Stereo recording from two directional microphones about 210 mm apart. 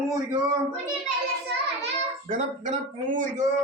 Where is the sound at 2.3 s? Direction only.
35° right (ahead or behind).